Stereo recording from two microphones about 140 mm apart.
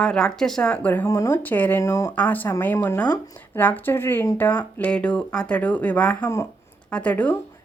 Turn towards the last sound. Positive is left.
turn(degrees=10)  # may be behind; listen again after turning